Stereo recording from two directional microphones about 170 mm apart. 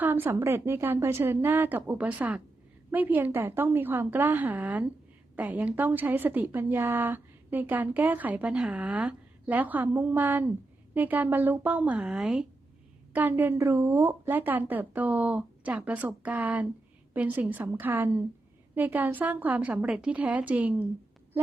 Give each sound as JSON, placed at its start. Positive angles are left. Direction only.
{"t": 0.0, "sound": "a woman's voice", "side_deg": -10}